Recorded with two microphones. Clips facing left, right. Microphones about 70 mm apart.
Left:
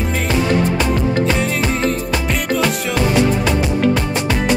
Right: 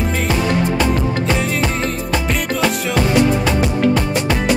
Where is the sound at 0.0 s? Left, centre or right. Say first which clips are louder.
Even; centre.